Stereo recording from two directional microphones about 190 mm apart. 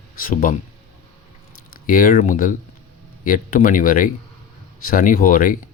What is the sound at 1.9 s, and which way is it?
Speech, 50° left (ahead or behind).